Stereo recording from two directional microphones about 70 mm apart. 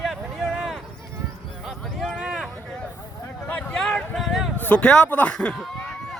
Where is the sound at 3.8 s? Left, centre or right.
Centre.